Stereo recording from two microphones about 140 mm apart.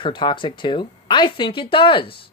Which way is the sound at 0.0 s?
35° left (ahead or behind).